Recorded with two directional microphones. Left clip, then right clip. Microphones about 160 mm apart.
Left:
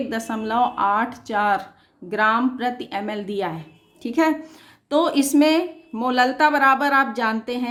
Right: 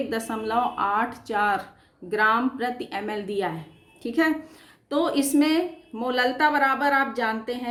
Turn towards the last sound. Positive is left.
turn(degrees=40)  # may be behind; listen again after turning